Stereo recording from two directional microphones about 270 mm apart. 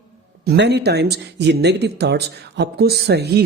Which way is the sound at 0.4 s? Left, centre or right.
Right.